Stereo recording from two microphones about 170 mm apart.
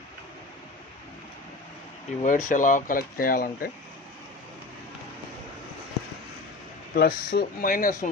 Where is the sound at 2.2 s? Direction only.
50° left (ahead or behind).